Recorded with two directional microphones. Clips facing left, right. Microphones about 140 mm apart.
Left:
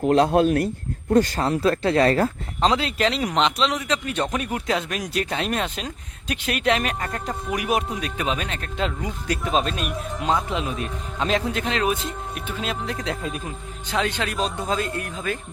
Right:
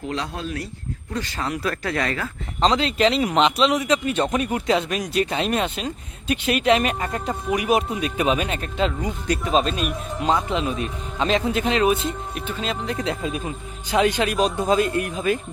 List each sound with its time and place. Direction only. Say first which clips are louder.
0.0 s speech: left 11 dB; 55° left (ahead or behind)
1.1 s speech: left 10 dB; 45° left (ahead or behind)
1.5 s speech: left 5 dB; 25° left (ahead or behind)
2.6 s speech: right 2 dB; 5° left (ahead or behind)
13.9 s speech: right 5 dB; 15° right (ahead or behind)